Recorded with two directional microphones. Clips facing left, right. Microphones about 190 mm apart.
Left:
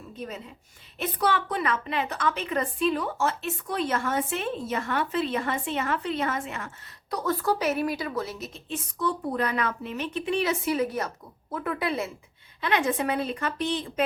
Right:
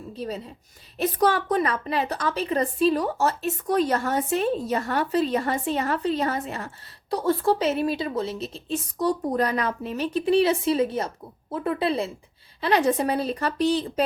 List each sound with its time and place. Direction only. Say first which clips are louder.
0.2 s a woman's voice: right 5 dB; 35° right (ahead or behind)